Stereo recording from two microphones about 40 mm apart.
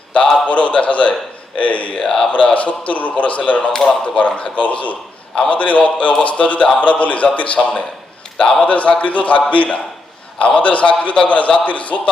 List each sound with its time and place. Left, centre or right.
0.1 s a man's voice: left
0.4 s a man's voice: left
2.0 s speech: centre
2.3 s a man's voice: left
3.7 s speech: centre
4.0 s a man's voice: left
10.3 s a man's voice: left
10.6 s a man's voice: left